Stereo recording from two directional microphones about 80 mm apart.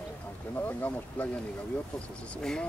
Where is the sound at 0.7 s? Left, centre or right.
Left.